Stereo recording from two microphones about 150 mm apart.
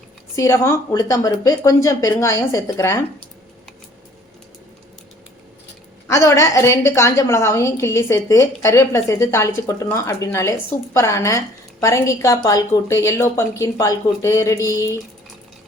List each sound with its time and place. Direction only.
0.3 s a woman's voice: 20° left (ahead or behind)
6.1 s a woman's voice: 20° left (ahead or behind)